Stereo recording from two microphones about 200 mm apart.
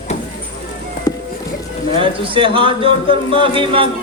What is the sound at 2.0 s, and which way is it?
Speech, 25° right (ahead or behind).